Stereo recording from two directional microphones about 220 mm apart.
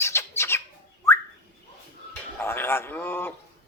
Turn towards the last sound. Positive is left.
turn(degrees=10)  # may be behind; listen again after turning